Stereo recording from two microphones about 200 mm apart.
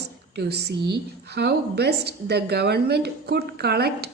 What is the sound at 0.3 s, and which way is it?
A woman's voice, 55° right (ahead or behind).